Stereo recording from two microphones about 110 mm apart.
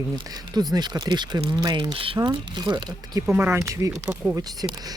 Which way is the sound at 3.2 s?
20° right (ahead or behind).